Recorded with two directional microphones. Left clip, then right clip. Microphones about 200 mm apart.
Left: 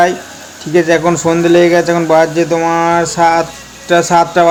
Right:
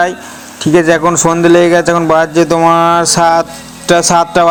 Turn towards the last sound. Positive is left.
turn(degrees=-25)  # may be behind; listen again after turning